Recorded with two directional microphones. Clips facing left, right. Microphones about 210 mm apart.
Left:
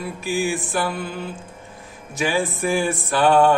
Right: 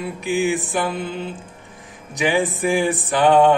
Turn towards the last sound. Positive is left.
turn(degrees=-20)  # may be behind; listen again after turning